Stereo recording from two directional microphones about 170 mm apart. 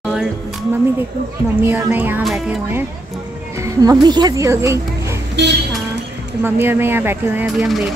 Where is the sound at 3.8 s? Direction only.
25° right (ahead or behind).